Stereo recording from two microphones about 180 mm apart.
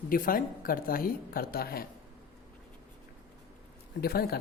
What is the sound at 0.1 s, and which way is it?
Speech, 50° left (ahead or behind).